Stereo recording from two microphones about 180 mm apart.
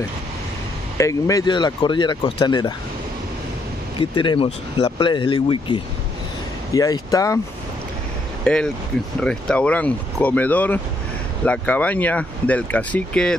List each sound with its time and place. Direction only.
0.9 s speech: 15° left (ahead or behind)
4.0 s speech: 25° left (ahead or behind)
8.5 s speech: 5° left (ahead or behind)